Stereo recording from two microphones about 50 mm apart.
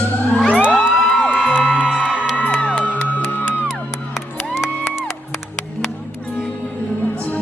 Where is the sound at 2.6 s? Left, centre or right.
Left.